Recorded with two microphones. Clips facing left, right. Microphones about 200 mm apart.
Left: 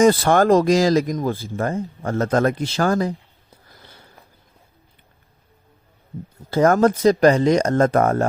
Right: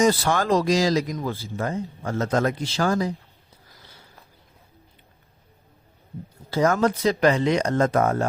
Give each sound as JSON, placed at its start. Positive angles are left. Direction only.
{"t": 0.0, "sound": "speech", "side_deg": 55}
{"t": 6.5, "sound": "speech", "side_deg": 50}